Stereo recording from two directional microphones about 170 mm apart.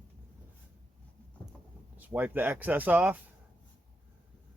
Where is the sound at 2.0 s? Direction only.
10° right (ahead or behind).